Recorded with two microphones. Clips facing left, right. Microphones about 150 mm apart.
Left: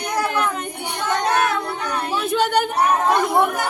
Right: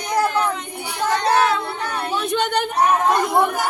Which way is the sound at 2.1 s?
5° left (ahead or behind).